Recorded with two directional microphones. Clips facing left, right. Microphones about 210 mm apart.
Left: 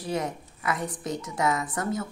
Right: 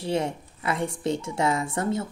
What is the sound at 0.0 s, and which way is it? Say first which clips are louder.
A woman's voice: right 3 dB; 25° right (ahead or behind).